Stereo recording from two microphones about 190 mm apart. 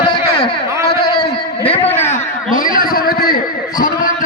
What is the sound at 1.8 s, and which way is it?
Speech, 10° left (ahead or behind).